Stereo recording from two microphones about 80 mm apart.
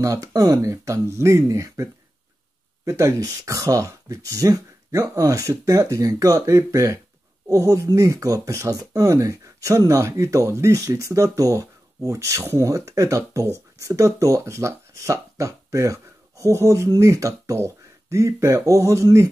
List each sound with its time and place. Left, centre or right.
0.0 s speech: right